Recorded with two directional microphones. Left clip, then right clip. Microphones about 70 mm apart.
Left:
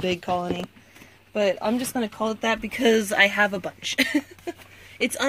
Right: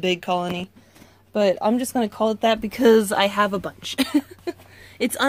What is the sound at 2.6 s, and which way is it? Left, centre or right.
Speech, right.